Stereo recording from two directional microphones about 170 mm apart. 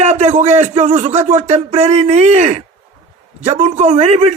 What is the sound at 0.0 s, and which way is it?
A man's voice, 40° right (ahead or behind).